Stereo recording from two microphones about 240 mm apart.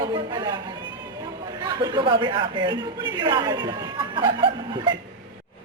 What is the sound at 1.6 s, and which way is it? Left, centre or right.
A man's voice, centre.